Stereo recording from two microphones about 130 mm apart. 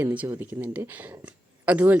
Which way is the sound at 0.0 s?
10° right (ahead or behind).